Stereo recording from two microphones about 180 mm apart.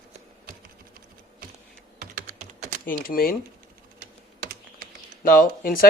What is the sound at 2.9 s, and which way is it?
Speech, 55° left (ahead or behind).